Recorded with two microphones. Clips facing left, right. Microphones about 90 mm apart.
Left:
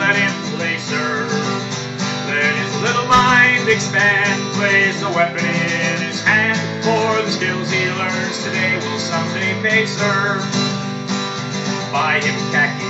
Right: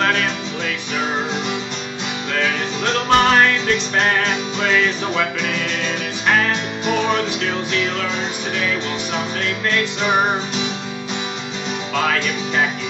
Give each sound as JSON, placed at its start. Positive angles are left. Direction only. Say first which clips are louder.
{"t": 2.8, "sound": "music", "louder": "left 2 dB", "side_deg": 20}
{"t": 6.8, "sound": "music", "louder": "left 4 dB", "side_deg": 20}